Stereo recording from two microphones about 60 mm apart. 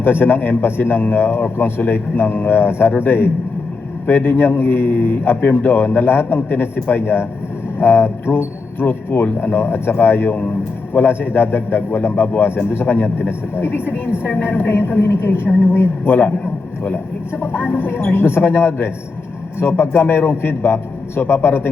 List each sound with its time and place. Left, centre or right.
0.0 s speech: left
17.4 s speech: left